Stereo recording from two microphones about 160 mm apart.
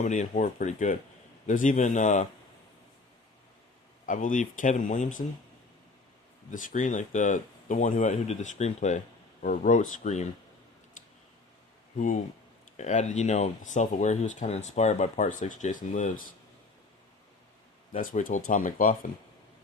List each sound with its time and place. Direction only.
0.0 s speech: 45° left (ahead or behind)
4.0 s speech: 55° left (ahead or behind)
6.5 s speech: 55° left (ahead or behind)
11.9 s speech: 55° left (ahead or behind)
17.9 s speech: 55° left (ahead or behind)